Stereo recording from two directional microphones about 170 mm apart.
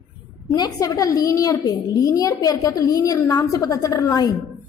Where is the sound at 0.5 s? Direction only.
20° left (ahead or behind).